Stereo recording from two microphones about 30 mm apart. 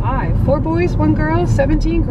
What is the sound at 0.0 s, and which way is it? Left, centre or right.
Speech, centre.